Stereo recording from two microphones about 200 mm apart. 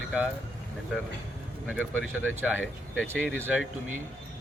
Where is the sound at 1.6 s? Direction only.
5° left (ahead or behind).